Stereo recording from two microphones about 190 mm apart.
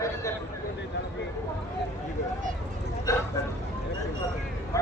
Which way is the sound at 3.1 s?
15° left (ahead or behind).